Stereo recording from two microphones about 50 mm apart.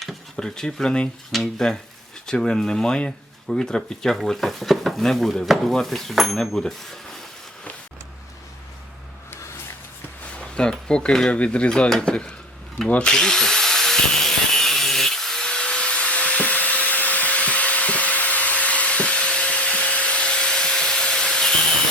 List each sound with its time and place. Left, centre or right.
0.3 s speech: centre
10.3 s speech: centre
11.7 s speech: centre
13.1 s tools: centre